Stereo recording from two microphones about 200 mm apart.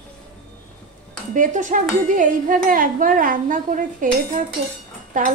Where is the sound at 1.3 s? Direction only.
40° right (ahead or behind).